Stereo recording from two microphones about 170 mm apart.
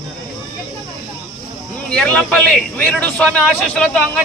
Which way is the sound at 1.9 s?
5° left (ahead or behind).